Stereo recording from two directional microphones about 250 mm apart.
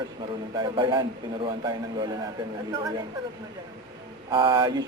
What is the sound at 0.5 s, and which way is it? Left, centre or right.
Speech, centre.